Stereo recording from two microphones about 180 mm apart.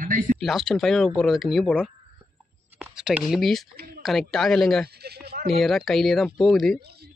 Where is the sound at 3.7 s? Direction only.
60° right (ahead or behind).